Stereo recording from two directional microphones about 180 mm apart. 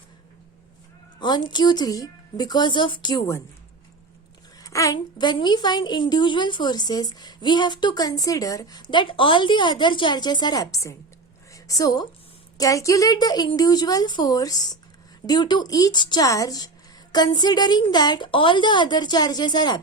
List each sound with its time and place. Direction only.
1.2 s a woman's voice: 25° left (ahead or behind)
4.6 s a woman's voice: 20° left (ahead or behind)